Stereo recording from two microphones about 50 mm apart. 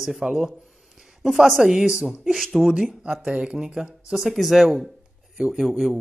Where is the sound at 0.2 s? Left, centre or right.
Centre.